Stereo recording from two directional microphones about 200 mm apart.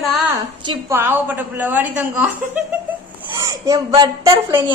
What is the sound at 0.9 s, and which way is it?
A woman's voice, 10° right (ahead or behind).